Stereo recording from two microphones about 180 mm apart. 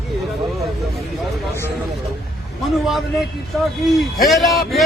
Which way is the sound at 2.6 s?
Centre (ahead or behind).